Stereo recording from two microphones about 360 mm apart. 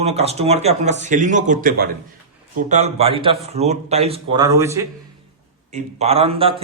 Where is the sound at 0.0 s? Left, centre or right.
Centre.